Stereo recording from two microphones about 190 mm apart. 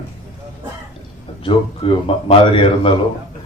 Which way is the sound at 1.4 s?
30° left (ahead or behind).